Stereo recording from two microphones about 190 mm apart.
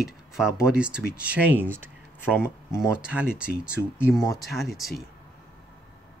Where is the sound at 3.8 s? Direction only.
15° left (ahead or behind).